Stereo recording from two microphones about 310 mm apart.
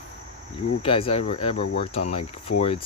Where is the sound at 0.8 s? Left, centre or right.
Centre.